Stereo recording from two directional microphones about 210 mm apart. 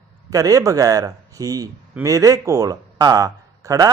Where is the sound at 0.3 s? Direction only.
15° right (ahead or behind).